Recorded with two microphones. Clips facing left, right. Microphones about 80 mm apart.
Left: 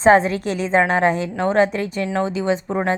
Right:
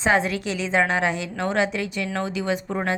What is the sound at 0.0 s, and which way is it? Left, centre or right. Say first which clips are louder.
A woman's voice: left 7 dB; left.